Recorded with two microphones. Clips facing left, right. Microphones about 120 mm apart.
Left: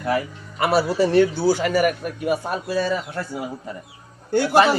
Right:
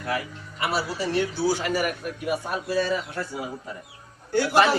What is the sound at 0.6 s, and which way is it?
A man's voice, 50° left (ahead or behind).